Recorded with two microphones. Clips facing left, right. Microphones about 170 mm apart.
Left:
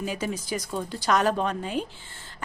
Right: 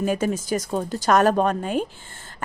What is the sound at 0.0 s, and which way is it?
A woman's voice, 50° right (ahead or behind).